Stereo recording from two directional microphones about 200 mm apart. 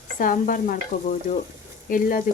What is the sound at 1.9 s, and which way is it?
Stir, 45° left (ahead or behind).